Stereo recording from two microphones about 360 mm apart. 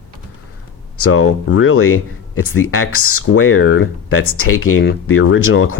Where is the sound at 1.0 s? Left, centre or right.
Left.